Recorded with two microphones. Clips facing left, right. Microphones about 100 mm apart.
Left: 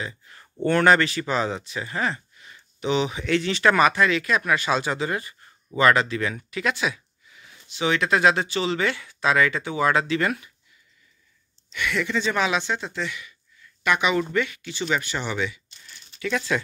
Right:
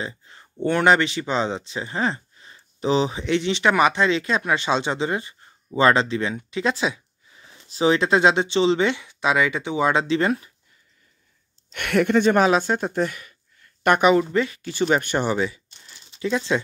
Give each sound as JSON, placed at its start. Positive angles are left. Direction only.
{"t": 0.0, "sound": "a sound", "side_deg": -25}
{"t": 0.7, "sound": "speech", "side_deg": -20}
{"t": 11.7, "sound": "speech", "side_deg": -60}
{"t": 14.1, "sound": "speech", "side_deg": -30}
{"t": 14.7, "sound": "speech", "side_deg": -45}
{"t": 15.3, "sound": "a sound", "side_deg": -35}